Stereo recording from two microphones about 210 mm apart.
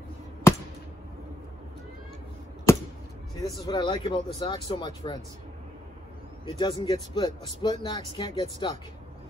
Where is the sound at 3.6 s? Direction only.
20° left (ahead or behind).